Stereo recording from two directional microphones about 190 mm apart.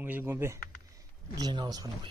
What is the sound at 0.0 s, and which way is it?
Speech, 10° right (ahead or behind).